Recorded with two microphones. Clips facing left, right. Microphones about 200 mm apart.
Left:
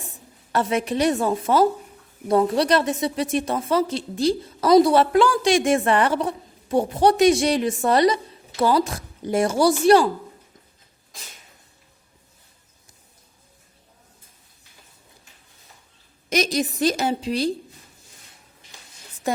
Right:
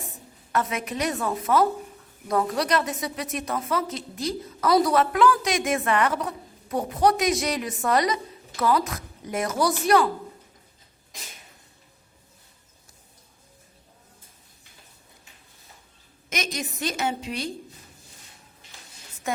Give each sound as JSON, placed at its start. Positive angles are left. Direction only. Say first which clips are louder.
{"t": 0.5, "sound": "a woman's voice", "louder": "left 5 dB", "side_deg": 30}
{"t": 16.3, "sound": "a woman's voice", "louder": "left 9 dB", "side_deg": 35}